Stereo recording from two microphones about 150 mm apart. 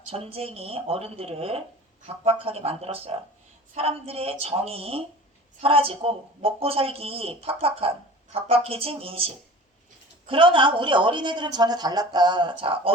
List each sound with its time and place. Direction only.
0.0 s speech: 40° right (ahead or behind)